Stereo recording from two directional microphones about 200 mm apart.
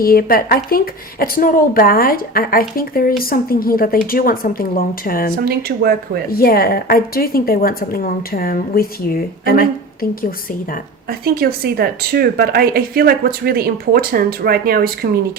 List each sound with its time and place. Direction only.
0.0 s a woman's voice: 50° left (ahead or behind)
5.5 s speech: 50° right (ahead or behind)
6.4 s a woman's voice: 50° left (ahead or behind)
11.1 s speech: 50° right (ahead or behind)